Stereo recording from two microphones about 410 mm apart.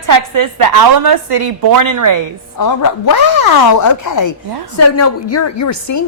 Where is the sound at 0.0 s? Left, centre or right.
Right.